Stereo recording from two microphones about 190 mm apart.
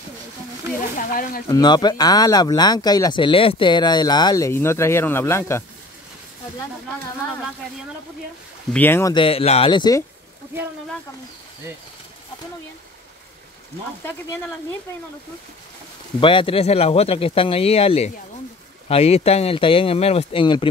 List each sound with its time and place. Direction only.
0.9 s speech: 45° left (ahead or behind)
1.5 s speech: 20° left (ahead or behind)
8.7 s speech: 10° left (ahead or behind)
9.1 s speech: 30° left (ahead or behind)
14.0 s speech: 10° left (ahead or behind)
16.2 s speech: 25° left (ahead or behind)